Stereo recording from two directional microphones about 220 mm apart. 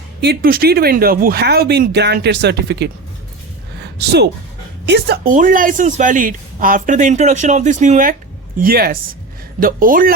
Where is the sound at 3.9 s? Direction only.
50° right (ahead or behind).